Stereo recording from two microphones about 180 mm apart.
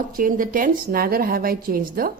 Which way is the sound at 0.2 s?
50° right (ahead or behind).